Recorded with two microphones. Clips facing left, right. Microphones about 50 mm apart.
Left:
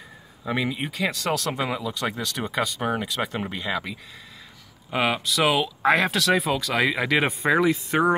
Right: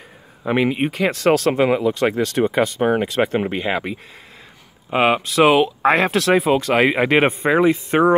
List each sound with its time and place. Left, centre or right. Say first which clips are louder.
0.5 s speech: right 8 dB; right